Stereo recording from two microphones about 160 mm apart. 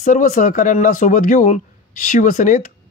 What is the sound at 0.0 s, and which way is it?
Speech, 50° left (ahead or behind).